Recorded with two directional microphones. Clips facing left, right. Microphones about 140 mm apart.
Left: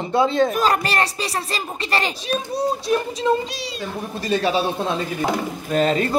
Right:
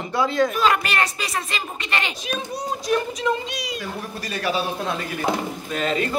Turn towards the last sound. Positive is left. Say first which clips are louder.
# left 5 dB
turn(degrees=35)  # may be behind; listen again after turning